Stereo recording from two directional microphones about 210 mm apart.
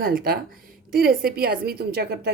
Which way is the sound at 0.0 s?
45° right (ahead or behind).